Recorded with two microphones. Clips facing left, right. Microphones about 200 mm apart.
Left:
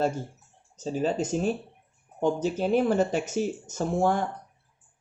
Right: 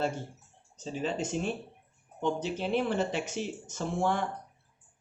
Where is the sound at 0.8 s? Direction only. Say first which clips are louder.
Left 6 dB; 40° left (ahead or behind).